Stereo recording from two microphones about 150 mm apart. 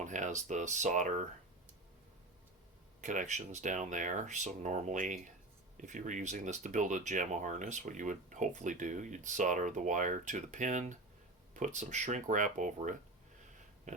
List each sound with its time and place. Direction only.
0.0 s speech: 55° right (ahead or behind)
3.0 s speech: 55° right (ahead or behind)